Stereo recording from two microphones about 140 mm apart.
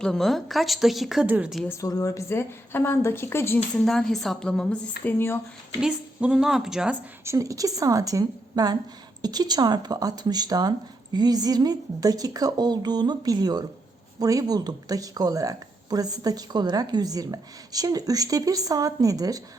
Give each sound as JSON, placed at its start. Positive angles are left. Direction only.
{"t": 0.0, "sound": "a woman's voice", "side_deg": 5}
{"t": 1.8, "sound": "speech", "side_deg": 25}
{"t": 3.8, "sound": "a woman's voice", "side_deg": 0}
{"t": 5.8, "sound": "a woman's voice", "side_deg": -5}
{"t": 7.3, "sound": "speech", "side_deg": -25}